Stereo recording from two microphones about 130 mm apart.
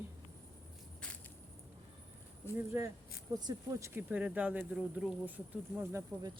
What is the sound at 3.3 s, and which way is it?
Speech, 25° right (ahead or behind).